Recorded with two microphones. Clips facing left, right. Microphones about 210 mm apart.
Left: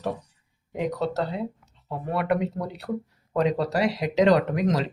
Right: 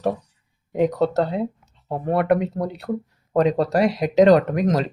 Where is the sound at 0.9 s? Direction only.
50° right (ahead or behind).